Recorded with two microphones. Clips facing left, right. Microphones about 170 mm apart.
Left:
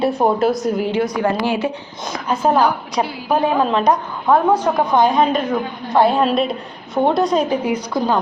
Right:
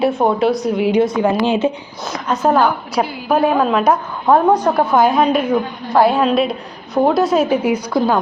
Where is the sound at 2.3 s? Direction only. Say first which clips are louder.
Right 1 dB; 10° left (ahead or behind).